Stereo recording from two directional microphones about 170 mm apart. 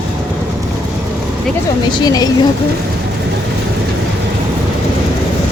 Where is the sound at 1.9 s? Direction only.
25° left (ahead or behind).